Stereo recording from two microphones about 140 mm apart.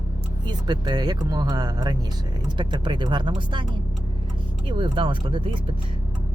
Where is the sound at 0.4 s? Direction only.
30° right (ahead or behind).